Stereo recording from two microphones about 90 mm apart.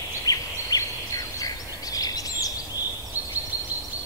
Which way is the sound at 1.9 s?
45° left (ahead or behind).